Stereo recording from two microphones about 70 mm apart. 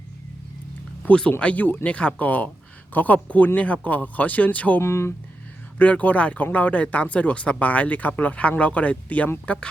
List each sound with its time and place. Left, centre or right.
1.0 s speech: centre
4.8 s speech: left
5.7 s speech: left